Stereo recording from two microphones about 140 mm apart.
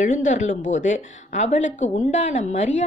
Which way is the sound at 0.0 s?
65° left (ahead or behind).